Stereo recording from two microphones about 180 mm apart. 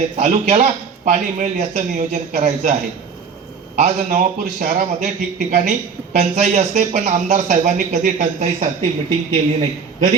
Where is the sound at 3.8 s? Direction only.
45° right (ahead or behind).